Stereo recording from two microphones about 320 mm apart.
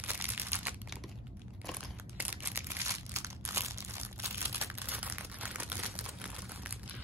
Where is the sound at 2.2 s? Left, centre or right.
Centre.